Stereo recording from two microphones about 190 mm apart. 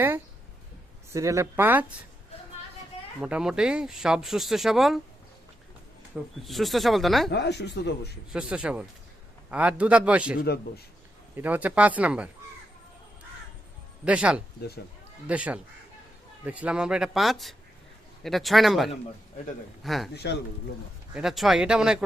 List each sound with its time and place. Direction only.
1.1 s speech: 15° right (ahead or behind)
3.2 s speech: 5° right (ahead or behind)
6.4 s speech: centre (ahead or behind)
7.3 s speech: 60° left (ahead or behind)
8.3 s speech: 5° right (ahead or behind)
11.3 s speech: 10° right (ahead or behind)
14.0 s speech: 5° right (ahead or behind)
21.2 s speech: centre (ahead or behind)